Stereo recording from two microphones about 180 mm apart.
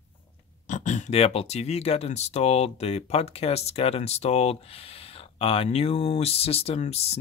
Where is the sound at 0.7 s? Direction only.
40° left (ahead or behind).